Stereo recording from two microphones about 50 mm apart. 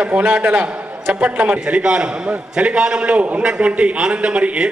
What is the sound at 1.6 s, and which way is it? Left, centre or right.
A man's voice, centre.